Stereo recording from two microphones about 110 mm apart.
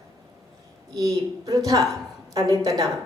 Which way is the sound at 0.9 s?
35° right (ahead or behind).